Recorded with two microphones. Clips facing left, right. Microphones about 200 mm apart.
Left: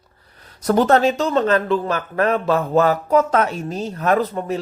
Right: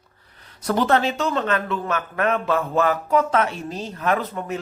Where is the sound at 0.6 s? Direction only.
40° left (ahead or behind).